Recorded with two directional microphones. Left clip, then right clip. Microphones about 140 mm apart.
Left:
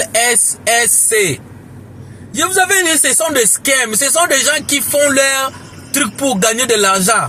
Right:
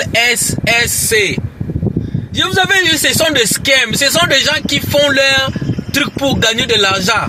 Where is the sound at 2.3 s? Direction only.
25° left (ahead or behind).